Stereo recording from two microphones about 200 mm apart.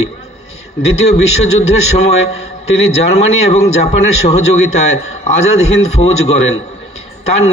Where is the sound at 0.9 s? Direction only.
35° left (ahead or behind).